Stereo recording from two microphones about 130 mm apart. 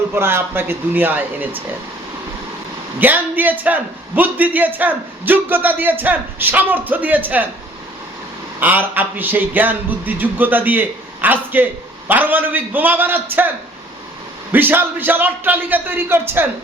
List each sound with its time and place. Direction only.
0.1 s a man's voice: 20° right (ahead or behind)
3.0 s a man's voice: 15° right (ahead or behind)
8.6 s a man's voice: 15° right (ahead or behind)
14.5 s a man's voice: 15° right (ahead or behind)